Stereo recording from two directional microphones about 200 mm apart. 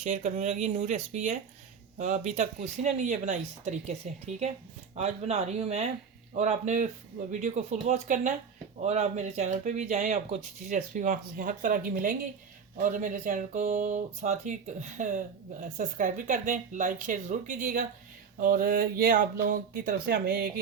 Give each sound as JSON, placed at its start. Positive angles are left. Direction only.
{"t": 0.0, "sound": "speech", "side_deg": -35}
{"t": 4.9, "sound": "speech", "side_deg": -35}